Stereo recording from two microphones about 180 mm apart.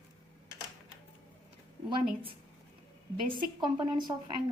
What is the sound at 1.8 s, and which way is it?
Speech, 30° right (ahead or behind).